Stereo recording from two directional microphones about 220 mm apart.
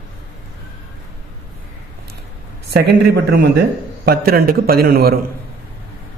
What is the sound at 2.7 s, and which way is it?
A man's voice, 50° right (ahead or behind).